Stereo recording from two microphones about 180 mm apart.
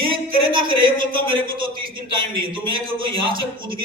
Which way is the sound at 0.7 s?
30° right (ahead or behind).